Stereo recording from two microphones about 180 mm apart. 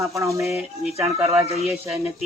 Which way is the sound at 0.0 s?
15° right (ahead or behind).